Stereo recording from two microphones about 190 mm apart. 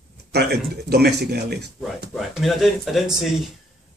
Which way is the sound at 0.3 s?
60° right (ahead or behind).